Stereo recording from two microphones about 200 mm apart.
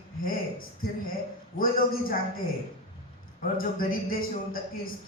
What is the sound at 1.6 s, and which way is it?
Speech, 45° left (ahead or behind).